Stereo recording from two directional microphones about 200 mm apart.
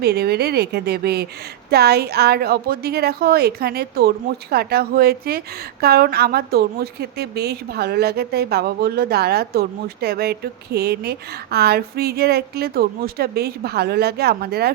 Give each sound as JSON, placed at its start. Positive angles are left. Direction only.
{"t": 0.0, "sound": "speech", "side_deg": -55}